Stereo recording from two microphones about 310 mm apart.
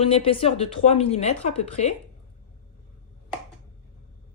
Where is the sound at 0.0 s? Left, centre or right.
Centre.